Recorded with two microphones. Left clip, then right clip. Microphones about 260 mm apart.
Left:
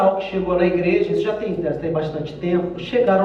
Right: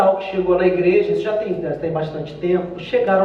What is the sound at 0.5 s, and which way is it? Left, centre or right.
Speech, centre.